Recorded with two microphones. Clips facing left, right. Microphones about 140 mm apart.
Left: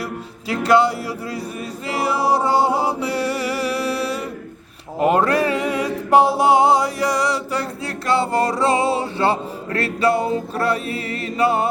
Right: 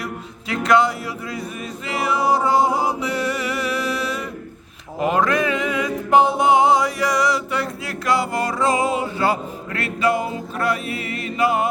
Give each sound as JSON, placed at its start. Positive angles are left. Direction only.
{"t": 0.0, "sound": "a man's voice", "side_deg": 35}
{"t": 1.9, "sound": "music", "side_deg": 30}
{"t": 4.9, "sound": "a capella", "side_deg": 40}